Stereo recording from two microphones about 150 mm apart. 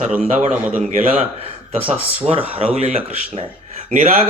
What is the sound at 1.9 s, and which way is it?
Speech, 40° right (ahead or behind).